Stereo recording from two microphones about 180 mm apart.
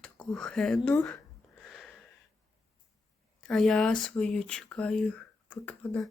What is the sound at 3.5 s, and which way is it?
Speech, 5° left (ahead or behind).